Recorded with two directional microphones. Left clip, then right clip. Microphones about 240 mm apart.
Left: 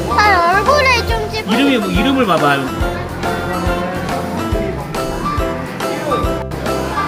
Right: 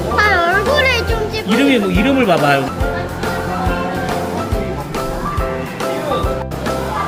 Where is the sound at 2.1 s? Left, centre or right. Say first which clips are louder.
Even; right.